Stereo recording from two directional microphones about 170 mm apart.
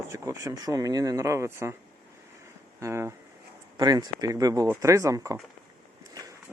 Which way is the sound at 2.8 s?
15° right (ahead or behind).